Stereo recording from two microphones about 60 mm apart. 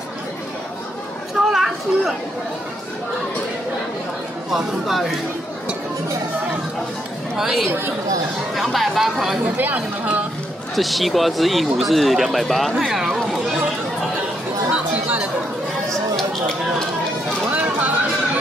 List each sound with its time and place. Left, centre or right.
1.4 s a sound: centre
4.5 s speech: centre
7.3 s speech: centre
9.8 s speech: right
10.8 s speech: centre
14.7 s chatter: right
17.5 s music: right